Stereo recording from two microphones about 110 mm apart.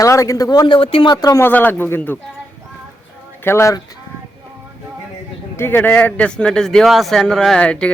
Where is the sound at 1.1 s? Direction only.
30° left (ahead or behind).